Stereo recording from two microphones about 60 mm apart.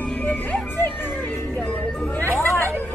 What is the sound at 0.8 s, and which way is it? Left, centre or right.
Music, left.